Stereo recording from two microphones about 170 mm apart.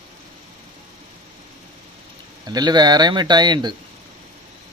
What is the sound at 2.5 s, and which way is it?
A man's voice, 25° right (ahead or behind).